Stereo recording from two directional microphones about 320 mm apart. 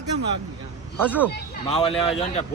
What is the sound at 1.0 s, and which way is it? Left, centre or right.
Speech, centre.